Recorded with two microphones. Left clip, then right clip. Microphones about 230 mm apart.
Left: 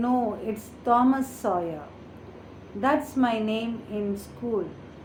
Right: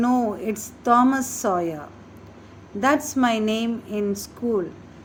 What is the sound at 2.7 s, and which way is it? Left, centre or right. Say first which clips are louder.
A woman's voice: right 3 dB; right.